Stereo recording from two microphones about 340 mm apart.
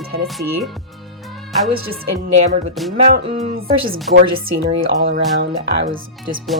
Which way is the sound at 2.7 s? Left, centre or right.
Centre.